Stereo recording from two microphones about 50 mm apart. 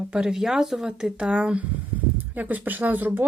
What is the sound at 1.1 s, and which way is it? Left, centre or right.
Speech, right.